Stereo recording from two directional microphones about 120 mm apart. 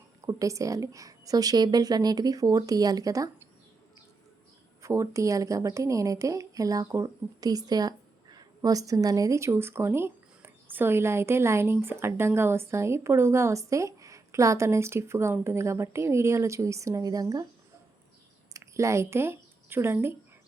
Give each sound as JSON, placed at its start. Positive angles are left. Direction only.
{"t": 0.3, "sound": "a woman's voice", "side_deg": -25}
{"t": 4.8, "sound": "a woman's voice", "side_deg": -25}
{"t": 18.5, "sound": "speech", "side_deg": -25}